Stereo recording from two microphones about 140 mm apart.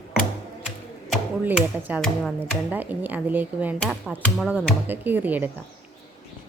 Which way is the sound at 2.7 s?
10° right (ahead or behind).